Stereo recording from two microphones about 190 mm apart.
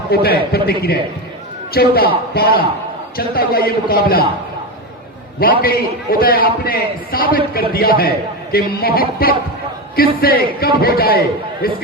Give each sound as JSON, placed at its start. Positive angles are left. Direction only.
{"t": 0.1, "sound": "a man's voice", "side_deg": 55}
{"t": 5.4, "sound": "a man's voice", "side_deg": 50}